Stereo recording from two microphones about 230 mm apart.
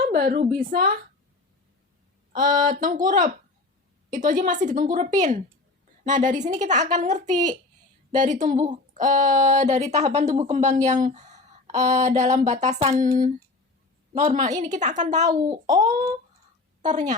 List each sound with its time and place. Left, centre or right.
0.0 s speech: right
2.3 s speech: right
15.6 s a child's voice: centre
16.8 s speech: right